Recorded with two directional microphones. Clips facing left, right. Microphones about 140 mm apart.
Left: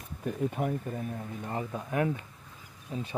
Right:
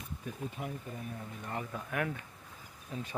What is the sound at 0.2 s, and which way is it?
Speech, 65° left (ahead or behind).